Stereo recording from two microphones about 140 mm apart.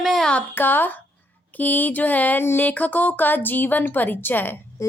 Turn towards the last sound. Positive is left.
turn(degrees=15)  # may be behind; listen again after turning